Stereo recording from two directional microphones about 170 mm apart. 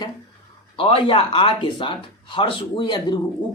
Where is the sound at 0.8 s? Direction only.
30° left (ahead or behind).